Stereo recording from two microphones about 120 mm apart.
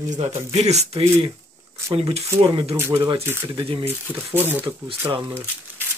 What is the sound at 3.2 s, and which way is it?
Speech, 15° right (ahead or behind).